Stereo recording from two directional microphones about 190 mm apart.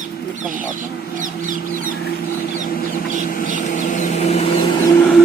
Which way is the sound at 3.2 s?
45° left (ahead or behind).